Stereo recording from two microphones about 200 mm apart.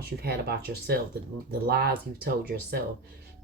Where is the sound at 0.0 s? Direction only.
50° right (ahead or behind).